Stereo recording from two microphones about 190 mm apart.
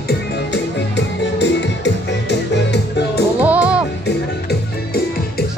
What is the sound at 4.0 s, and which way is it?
Music, 60° left (ahead or behind).